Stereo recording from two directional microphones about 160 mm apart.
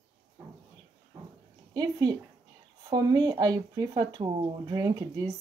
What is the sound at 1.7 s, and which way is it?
Speech, 25° right (ahead or behind).